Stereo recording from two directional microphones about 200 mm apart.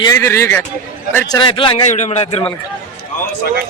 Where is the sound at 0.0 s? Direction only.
15° left (ahead or behind).